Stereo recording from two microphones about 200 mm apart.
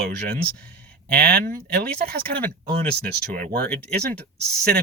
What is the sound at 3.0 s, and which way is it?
Speech, 45° right (ahead or behind).